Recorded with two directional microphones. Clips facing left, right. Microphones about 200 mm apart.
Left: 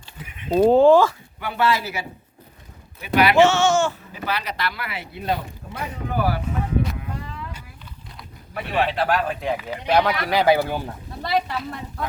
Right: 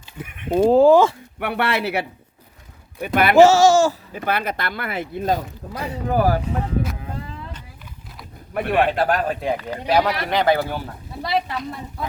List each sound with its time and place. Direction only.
0.2 s speech: 55° right (ahead or behind)
0.6 s a woman's voice: centre (ahead or behind)
1.4 s speech: 65° right (ahead or behind)
3.0 s speech: 50° right (ahead or behind)
4.3 s speech: 55° right (ahead or behind)
7.0 s a sound: 30° right (ahead or behind)
8.5 s speech: 55° right (ahead or behind)
9.9 s a woman's voice: 5° right (ahead or behind)
10.3 s speech: 10° left (ahead or behind)
11.3 s a woman's voice: centre (ahead or behind)